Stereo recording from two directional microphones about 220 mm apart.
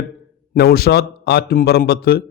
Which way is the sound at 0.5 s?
45° left (ahead or behind).